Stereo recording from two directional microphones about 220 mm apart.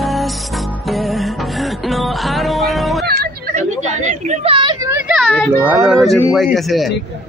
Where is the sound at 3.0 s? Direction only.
45° right (ahead or behind); by 5.6 s 5° left (ahead or behind).